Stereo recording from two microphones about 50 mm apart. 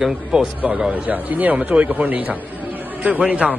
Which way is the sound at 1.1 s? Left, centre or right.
Right.